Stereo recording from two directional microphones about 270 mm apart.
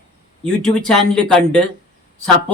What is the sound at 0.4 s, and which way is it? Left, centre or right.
Speech, centre.